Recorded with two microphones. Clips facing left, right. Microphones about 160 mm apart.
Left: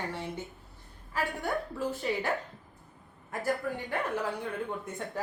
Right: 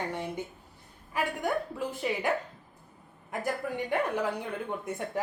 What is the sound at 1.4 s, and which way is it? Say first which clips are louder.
Speech: right 1 dB; 15° right (ahead or behind).